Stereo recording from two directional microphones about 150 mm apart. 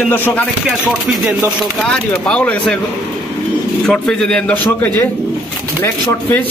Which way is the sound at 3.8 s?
5° left (ahead or behind).